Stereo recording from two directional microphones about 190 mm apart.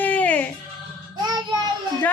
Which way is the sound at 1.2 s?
20° right (ahead or behind).